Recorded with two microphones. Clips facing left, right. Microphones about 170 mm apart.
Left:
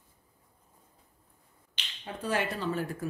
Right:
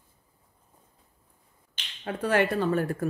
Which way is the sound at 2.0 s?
65° right (ahead or behind).